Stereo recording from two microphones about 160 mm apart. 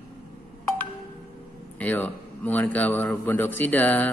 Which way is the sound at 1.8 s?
10° left (ahead or behind).